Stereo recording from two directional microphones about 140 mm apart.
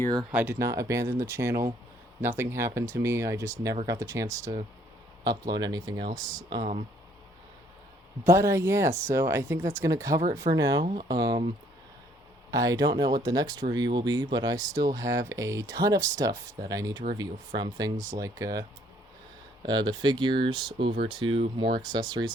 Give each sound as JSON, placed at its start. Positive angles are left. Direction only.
{"t": 0.1, "sound": "speech", "side_deg": -30}
{"t": 0.3, "sound": "speech", "side_deg": -15}
{"t": 8.2, "sound": "speech", "side_deg": -20}
{"t": 12.5, "sound": "speech", "side_deg": -25}
{"t": 19.6, "sound": "speech", "side_deg": -30}